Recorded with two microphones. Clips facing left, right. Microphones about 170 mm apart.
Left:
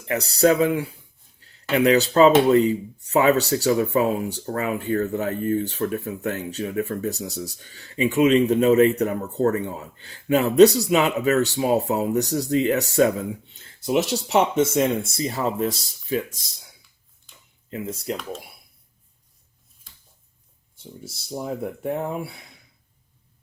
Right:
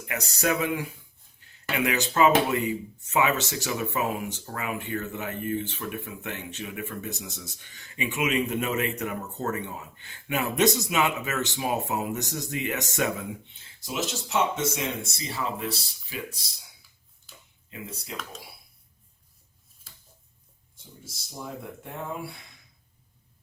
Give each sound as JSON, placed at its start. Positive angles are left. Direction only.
{"t": 0.0, "sound": "speech", "side_deg": 30}
{"t": 13.8, "sound": "speech", "side_deg": 60}
{"t": 21.0, "sound": "speech", "side_deg": 65}